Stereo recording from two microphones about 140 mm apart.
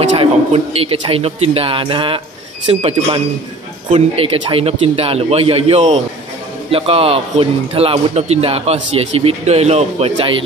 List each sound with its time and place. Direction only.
0.2 s speech: 45° right (ahead or behind)